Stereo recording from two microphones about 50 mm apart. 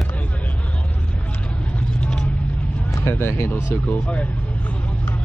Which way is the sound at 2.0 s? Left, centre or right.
Centre.